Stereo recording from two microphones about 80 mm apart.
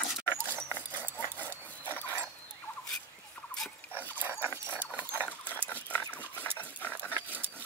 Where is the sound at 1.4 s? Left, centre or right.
Left.